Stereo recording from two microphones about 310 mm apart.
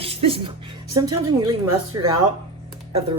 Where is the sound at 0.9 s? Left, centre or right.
Right.